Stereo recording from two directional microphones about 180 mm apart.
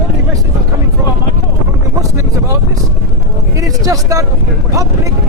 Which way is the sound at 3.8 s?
20° right (ahead or behind).